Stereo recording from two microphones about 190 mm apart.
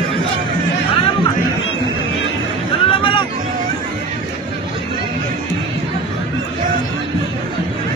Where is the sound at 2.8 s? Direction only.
25° left (ahead or behind).